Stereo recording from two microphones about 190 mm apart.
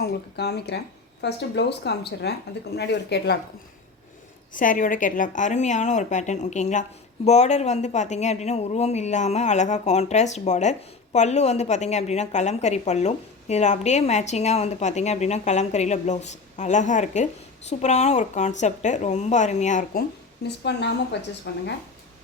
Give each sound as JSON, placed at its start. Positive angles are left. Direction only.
{"t": 0.0, "sound": "speech", "side_deg": 60}
{"t": 4.5, "sound": "speech", "side_deg": 45}
{"t": 20.7, "sound": "speech", "side_deg": 65}